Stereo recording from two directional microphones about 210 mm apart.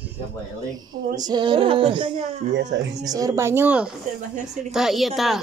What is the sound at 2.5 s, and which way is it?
Speech, 55° right (ahead or behind).